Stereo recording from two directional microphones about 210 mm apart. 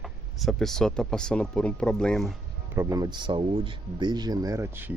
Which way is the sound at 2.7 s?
15° right (ahead or behind).